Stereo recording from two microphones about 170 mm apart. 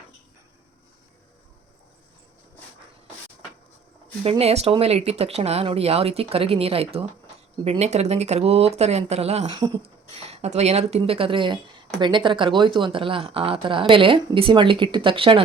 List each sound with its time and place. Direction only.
4.2 s a woman's voice: 35° right (ahead or behind)
9.6 s a woman's voice: 25° right (ahead or behind)